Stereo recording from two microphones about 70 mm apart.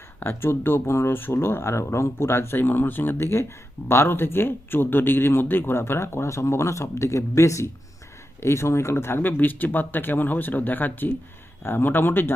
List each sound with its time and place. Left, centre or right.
0.2 s speech: left